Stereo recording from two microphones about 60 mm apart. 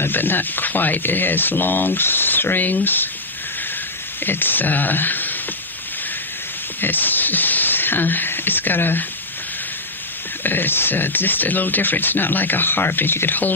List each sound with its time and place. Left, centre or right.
0.0 s speech: left
4.2 s speech: left
6.8 s speech: left
10.4 s speech: left